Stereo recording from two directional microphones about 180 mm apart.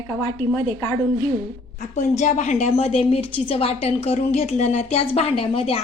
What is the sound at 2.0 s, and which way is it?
A woman's voice, 40° left (ahead or behind).